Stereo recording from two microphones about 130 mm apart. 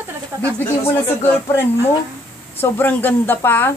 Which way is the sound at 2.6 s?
15° left (ahead or behind).